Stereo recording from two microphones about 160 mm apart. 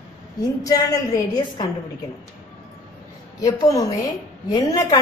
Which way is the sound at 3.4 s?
20° left (ahead or behind).